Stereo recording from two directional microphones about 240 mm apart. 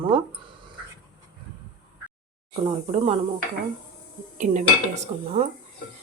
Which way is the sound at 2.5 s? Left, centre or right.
Right.